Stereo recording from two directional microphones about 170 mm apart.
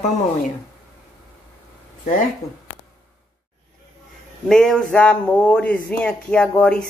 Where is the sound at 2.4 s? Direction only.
20° left (ahead or behind).